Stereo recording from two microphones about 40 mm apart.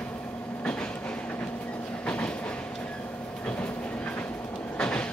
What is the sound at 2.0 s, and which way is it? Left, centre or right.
Train, left.